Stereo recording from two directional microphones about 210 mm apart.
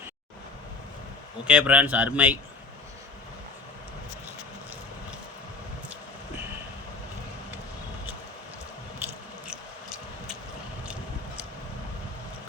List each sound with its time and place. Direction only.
1.5 s speech: 5° right (ahead or behind)